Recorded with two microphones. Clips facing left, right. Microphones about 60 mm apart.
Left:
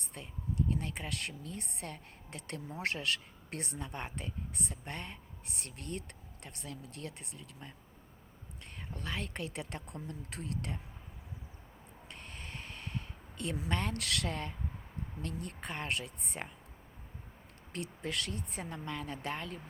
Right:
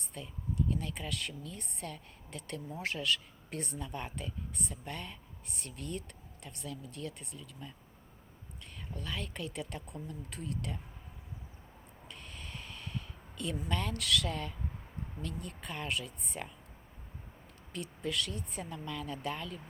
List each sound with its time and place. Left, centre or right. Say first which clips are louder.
0.1 s speech: even; left
3.8 s speech: right 1 dB; left
5.6 s speech: right 2 dB; left
8.9 s speech: left 1 dB; left
12.1 s a sound: left 1 dB; left
13.7 s speech: right 2 dB; left
16.4 s speech: right 1 dB; left
17.7 s speech: right 1 dB; left